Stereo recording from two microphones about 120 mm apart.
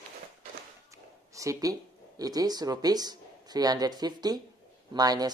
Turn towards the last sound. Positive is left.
turn(degrees=-35)  # may be behind; listen again after turning